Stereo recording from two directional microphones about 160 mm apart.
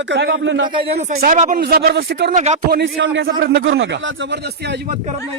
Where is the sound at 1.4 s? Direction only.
55° right (ahead or behind).